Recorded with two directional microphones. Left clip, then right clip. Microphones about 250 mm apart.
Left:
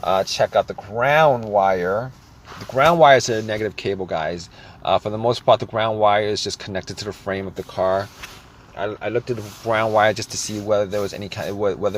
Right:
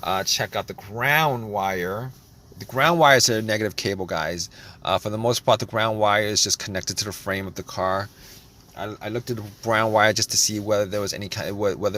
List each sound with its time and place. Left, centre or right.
0.0 s speech: right